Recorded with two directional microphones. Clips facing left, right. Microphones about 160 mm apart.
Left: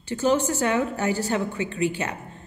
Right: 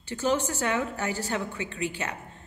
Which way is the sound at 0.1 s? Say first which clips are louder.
Left 5 dB; 40° left (ahead or behind).